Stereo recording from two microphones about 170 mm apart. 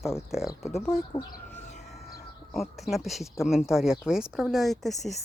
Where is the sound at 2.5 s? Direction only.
Centre (ahead or behind).